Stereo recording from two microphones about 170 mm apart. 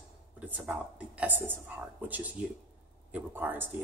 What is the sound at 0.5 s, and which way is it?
Speech, 5° right (ahead or behind).